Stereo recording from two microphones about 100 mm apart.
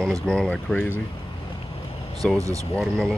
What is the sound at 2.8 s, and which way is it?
Speech, 5° left (ahead or behind).